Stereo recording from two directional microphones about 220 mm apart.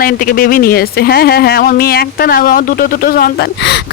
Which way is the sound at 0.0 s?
40° left (ahead or behind).